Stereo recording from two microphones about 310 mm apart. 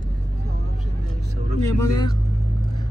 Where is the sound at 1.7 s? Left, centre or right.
Centre.